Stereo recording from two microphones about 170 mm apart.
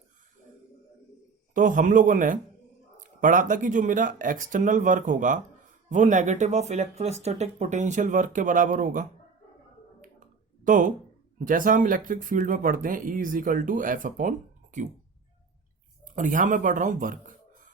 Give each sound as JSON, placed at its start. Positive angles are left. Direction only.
{"t": 1.5, "sound": "speech", "side_deg": -50}
{"t": 10.6, "sound": "speech", "side_deg": -50}
{"t": 16.0, "sound": "speech", "side_deg": -50}